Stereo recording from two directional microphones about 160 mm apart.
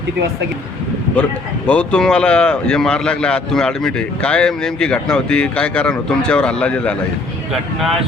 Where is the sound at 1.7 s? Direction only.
5° left (ahead or behind).